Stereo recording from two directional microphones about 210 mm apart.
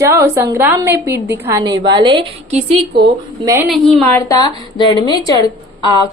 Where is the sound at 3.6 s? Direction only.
Centre (ahead or behind); by 5.2 s 20° left (ahead or behind).